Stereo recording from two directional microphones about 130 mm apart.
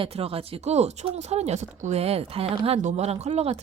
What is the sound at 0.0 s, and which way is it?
A woman's voice, 50° right (ahead or behind).